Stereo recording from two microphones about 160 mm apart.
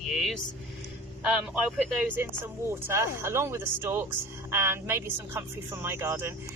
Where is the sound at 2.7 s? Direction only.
15° right (ahead or behind).